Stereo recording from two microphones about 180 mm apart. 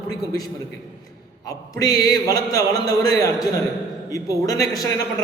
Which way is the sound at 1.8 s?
20° left (ahead or behind).